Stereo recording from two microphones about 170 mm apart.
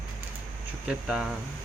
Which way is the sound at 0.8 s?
5° right (ahead or behind).